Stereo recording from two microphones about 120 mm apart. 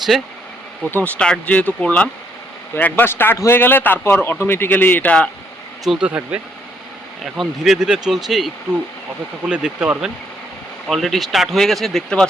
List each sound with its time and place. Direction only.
0.1 s speech: centre (ahead or behind)
0.9 s speech: 15° left (ahead or behind)
5.8 s speech: 5° right (ahead or behind)
9.5 s speech: 10° right (ahead or behind)
10.8 s speech: centre (ahead or behind)